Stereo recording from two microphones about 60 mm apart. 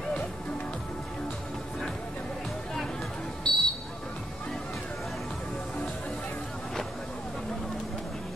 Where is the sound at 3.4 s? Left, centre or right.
Centre.